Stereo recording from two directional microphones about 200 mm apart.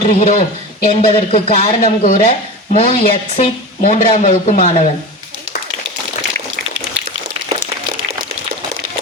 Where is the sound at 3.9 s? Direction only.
35° left (ahead or behind).